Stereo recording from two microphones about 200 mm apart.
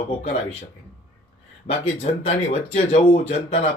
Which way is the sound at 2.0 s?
30° left (ahead or behind).